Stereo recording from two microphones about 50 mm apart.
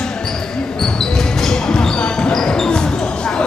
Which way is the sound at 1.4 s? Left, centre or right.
Centre.